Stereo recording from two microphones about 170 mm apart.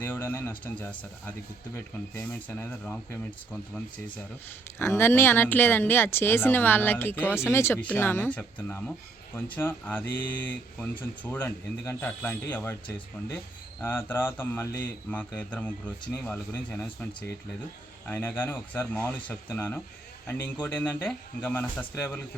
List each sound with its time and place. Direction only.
0.0 s speech: 15° left (ahead or behind)
4.8 s speech: 15° left (ahead or behind)
13.8 s speech: 10° left (ahead or behind)